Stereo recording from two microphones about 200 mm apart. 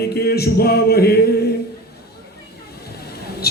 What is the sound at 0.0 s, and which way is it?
A man's voice, 50° left (ahead or behind).